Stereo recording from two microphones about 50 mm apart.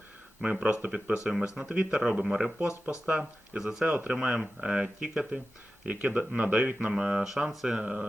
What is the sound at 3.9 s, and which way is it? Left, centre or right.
Speech, right.